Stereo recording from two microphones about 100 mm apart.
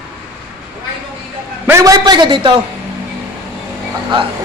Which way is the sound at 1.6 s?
30° right (ahead or behind).